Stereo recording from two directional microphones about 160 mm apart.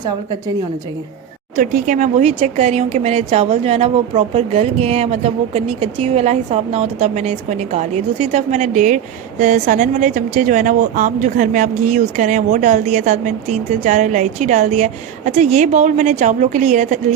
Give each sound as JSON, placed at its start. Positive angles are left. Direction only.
{"t": 1.5, "sound": "speech", "side_deg": -55}